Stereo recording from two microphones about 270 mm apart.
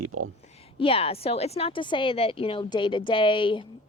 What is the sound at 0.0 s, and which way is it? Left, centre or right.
Speech, right.